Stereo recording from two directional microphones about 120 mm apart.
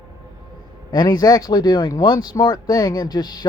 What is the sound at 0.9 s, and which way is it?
Speech, 35° left (ahead or behind).